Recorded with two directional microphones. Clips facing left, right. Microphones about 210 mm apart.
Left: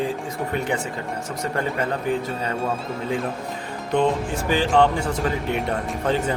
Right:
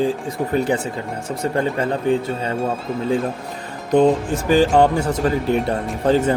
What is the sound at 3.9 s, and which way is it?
Music, 40° right (ahead or behind).